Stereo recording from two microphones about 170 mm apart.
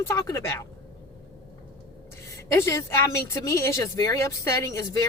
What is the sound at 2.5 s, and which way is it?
Speech, 15° left (ahead or behind).